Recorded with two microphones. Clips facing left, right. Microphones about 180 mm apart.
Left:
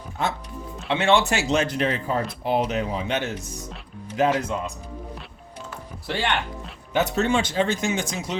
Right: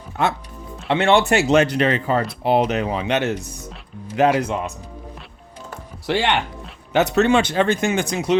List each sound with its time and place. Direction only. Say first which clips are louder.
0.9 s speech: right 4 dB; 60° right (ahead or behind)
4.4 s speech: right 4 dB; 75° right (ahead or behind)
6.1 s speech: right 6 dB; 75° right (ahead or behind)